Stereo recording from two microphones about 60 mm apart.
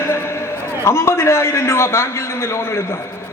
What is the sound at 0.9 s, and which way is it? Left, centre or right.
A man's voice, left.